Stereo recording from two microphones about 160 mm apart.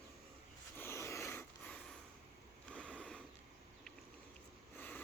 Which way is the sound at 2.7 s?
5° left (ahead or behind).